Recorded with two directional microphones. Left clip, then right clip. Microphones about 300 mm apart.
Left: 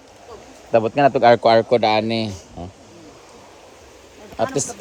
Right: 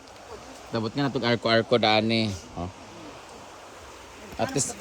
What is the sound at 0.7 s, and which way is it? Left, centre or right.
Speech, left.